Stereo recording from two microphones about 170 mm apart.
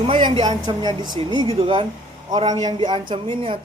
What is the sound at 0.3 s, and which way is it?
A man's voice, 25° right (ahead or behind).